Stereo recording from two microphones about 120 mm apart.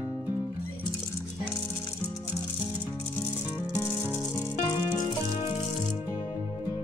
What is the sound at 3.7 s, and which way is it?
Rattle, 20° left (ahead or behind).